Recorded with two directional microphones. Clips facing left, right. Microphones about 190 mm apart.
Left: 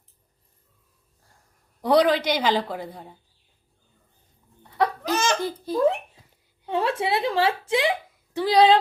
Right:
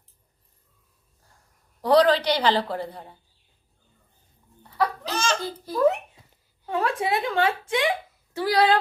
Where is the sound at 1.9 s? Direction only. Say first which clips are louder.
Right 1 dB; 10° left (ahead or behind).